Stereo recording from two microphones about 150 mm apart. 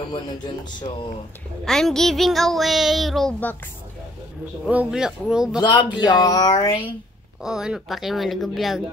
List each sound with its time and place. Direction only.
1.6 s speech: 5° left (ahead or behind)
4.6 s speech: 5° right (ahead or behind)
5.6 s speech: 30° left (ahead or behind)
7.4 s speech: 5° right (ahead or behind)